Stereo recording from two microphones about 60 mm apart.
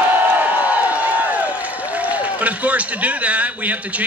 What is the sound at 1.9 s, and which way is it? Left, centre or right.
A man's voice, right.